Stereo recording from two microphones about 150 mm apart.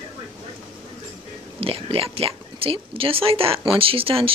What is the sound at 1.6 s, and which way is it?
Speech, 40° right (ahead or behind).